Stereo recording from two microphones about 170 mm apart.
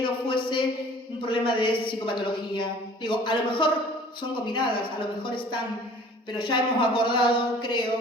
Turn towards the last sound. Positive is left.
turn(degrees=30)  # may be behind; listen again after turning